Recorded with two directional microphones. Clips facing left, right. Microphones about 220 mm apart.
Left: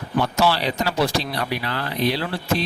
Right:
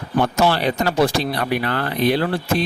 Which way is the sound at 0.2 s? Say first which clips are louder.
Right 3 dB; 50° right (ahead or behind).